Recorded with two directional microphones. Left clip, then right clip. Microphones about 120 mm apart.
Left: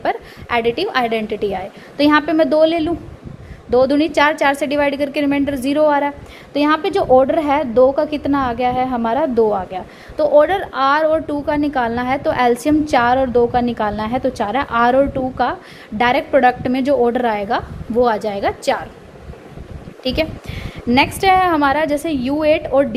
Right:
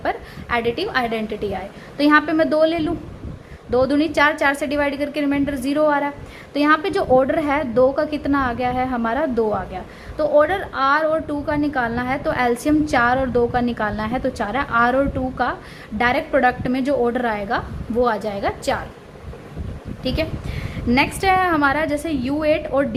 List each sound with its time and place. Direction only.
0.0 s a woman's voice: 40° left (ahead or behind)
6.5 s a woman's voice: 20° left (ahead or behind)
9.7 s a woman's voice: 40° left (ahead or behind)
20.1 s a woman's voice: 45° left (ahead or behind)